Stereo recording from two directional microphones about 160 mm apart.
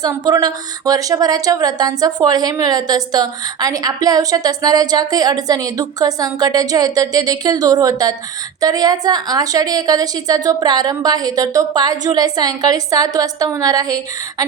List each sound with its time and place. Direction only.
0.0 s a woman's voice: 25° right (ahead or behind)